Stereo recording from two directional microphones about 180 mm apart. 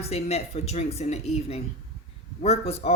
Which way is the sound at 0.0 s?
35° left (ahead or behind).